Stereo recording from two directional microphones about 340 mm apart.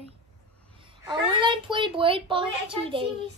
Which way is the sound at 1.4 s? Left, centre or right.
Centre.